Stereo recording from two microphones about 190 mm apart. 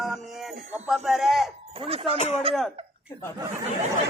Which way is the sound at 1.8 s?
30° right (ahead or behind).